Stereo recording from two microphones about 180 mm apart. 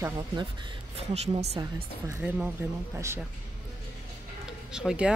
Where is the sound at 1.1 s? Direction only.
35° right (ahead or behind).